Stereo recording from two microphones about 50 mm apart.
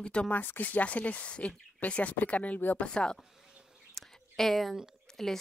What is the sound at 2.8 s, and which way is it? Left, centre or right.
Speech, centre.